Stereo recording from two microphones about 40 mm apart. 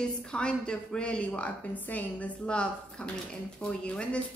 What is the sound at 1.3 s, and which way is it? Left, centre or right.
Speech, left.